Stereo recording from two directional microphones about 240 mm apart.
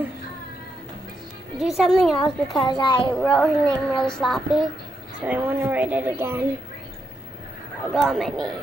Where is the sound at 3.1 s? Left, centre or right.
Centre.